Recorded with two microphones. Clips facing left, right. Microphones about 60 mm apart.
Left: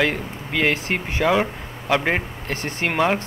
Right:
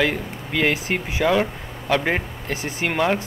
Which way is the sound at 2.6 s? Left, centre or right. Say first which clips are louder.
Even; left.